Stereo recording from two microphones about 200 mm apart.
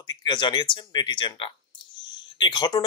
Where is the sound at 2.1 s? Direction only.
20° left (ahead or behind).